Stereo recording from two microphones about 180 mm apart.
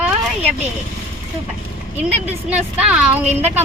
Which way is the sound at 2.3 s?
5° right (ahead or behind).